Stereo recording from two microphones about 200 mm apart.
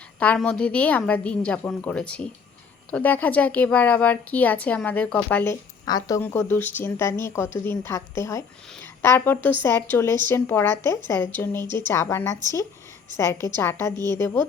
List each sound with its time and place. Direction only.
0.2 s a woman's voice: 5° left (ahead or behind)